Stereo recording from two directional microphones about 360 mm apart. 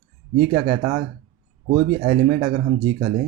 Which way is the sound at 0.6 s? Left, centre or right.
Centre.